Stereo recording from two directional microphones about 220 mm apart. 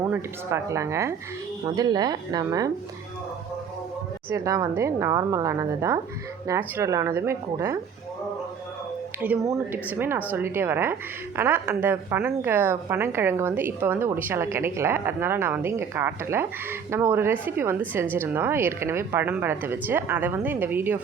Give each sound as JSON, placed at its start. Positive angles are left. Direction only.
{"t": 0.0, "sound": "a woman's voice", "side_deg": -10}
{"t": 4.3, "sound": "a woman's voice", "side_deg": -15}
{"t": 9.2, "sound": "a woman's voice", "side_deg": -10}